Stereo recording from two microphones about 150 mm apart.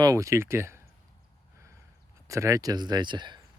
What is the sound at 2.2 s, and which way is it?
Speech, 20° right (ahead or behind).